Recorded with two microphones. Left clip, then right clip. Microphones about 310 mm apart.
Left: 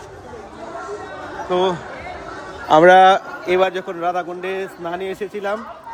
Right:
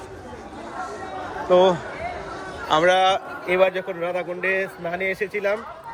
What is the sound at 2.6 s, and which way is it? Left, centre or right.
A man's voice, left.